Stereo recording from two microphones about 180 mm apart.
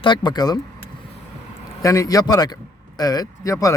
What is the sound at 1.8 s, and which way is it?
Speech, 20° left (ahead or behind).